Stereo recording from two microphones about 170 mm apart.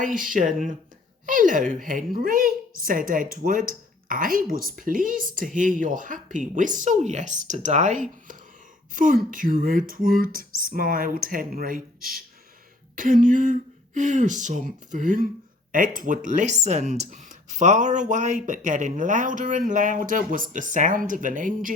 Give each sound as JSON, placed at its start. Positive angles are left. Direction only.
{"t": 0.0, "sound": "a woman's voice", "side_deg": -50}